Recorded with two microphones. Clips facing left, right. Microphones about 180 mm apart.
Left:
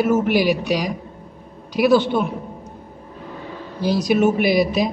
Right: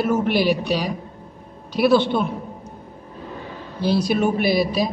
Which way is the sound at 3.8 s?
15° left (ahead or behind).